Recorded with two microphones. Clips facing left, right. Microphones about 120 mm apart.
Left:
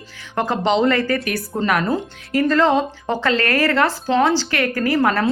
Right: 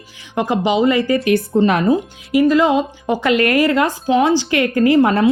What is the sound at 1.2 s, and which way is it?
A woman's voice, 20° right (ahead or behind).